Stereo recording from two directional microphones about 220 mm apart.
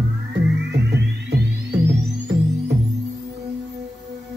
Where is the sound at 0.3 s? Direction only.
50° right (ahead or behind).